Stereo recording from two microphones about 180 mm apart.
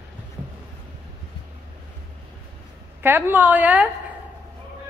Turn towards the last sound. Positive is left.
turn(degrees=-10)  # may be behind; listen again after turning